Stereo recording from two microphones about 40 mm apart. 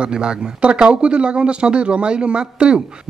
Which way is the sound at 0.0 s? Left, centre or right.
Right.